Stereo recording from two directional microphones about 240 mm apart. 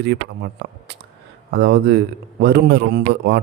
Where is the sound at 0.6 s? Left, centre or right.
Right.